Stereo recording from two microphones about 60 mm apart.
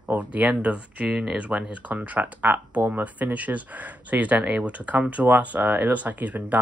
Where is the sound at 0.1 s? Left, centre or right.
Right.